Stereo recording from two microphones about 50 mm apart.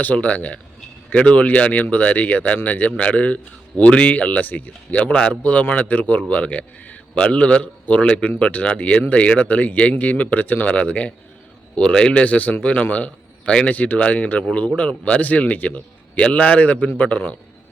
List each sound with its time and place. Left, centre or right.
0.0 s a man's voice: left
5.4 s a man's voice: left
11.8 s a man's voice: centre
12.2 s a man's voice: left
13.7 s a man's voice: left